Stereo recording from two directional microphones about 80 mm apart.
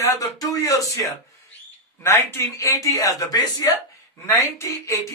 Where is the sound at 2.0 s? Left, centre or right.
Left.